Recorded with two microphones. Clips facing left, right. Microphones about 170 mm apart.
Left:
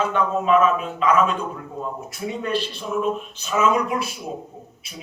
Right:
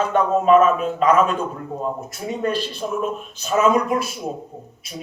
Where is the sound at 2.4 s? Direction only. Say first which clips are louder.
Right 4 dB; 45° right (ahead or behind).